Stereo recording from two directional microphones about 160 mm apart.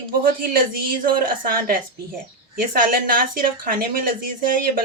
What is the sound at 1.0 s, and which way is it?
Speech, 65° right (ahead or behind).